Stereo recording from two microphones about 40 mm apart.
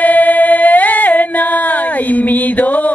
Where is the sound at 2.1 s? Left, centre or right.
Left.